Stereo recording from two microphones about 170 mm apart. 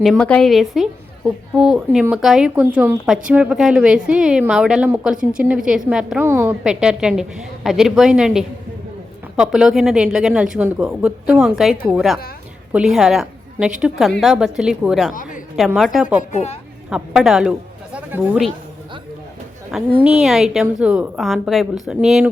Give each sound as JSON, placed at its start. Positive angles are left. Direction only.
{"t": 0.0, "sound": "a woman's voice", "side_deg": 5}
{"t": 15.1, "sound": "a woman's voice", "side_deg": 50}
{"t": 15.5, "sound": "speech", "side_deg": 0}
{"t": 16.3, "sound": "a woman's voice", "side_deg": 40}
{"t": 16.9, "sound": "speech", "side_deg": -5}
{"t": 19.7, "sound": "speech", "side_deg": 0}